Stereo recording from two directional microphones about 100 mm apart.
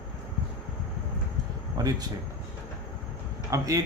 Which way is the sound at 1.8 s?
40° right (ahead or behind).